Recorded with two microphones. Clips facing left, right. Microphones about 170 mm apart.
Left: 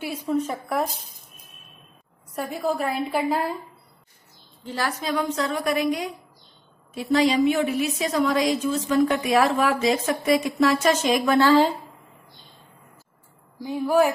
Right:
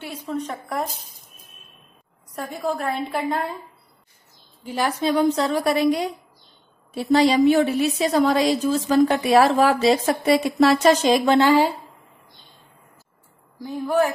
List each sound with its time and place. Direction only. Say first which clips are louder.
0.0 s a woman's voice: left 4 dB; 10° left (ahead or behind)
2.3 s a woman's voice: left 1 dB; 5° left (ahead or behind)
4.6 s a woman's voice: right 4 dB; 15° right (ahead or behind)
5.0 s a woman's voice: right 7 dB; 30° right (ahead or behind)
11.4 s a woman's voice: even; 10° right (ahead or behind)
13.6 s a woman's voice: left 1 dB; 5° left (ahead or behind)